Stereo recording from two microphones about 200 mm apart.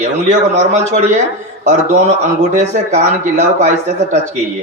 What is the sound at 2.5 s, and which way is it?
A man's voice, 35° right (ahead or behind).